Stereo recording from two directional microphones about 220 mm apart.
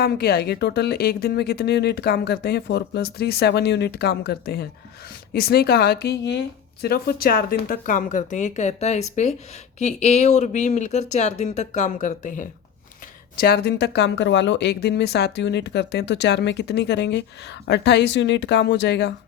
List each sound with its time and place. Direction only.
0.0 s a woman's voice: 45° left (ahead or behind)
13.4 s a woman's voice: 45° left (ahead or behind)